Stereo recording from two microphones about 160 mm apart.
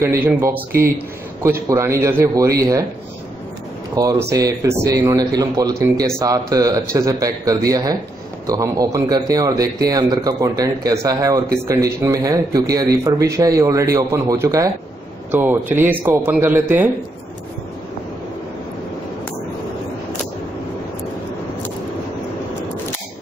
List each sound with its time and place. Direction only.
0.0 s a man's voice: 15° right (ahead or behind)
3.9 s a man's voice: 20° right (ahead or behind)